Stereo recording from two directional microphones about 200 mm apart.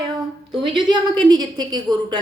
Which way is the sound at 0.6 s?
25° right (ahead or behind).